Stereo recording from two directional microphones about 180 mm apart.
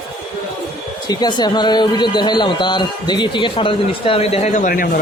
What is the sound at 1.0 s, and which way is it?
Speech, 20° left (ahead or behind).